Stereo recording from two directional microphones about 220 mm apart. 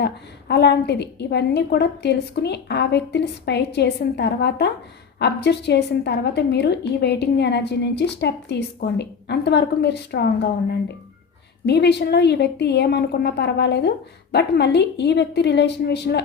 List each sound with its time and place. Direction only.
0.0 s a woman's voice: 50° left (ahead or behind)